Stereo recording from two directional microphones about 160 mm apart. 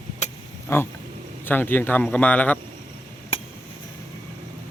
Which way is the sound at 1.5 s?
10° left (ahead or behind).